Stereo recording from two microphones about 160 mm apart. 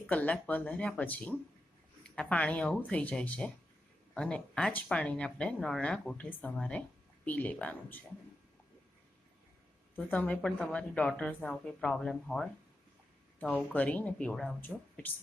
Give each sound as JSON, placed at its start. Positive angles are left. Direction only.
{"t": 0.1, "sound": "speech", "side_deg": 10}
{"t": 9.9, "sound": "speech", "side_deg": 10}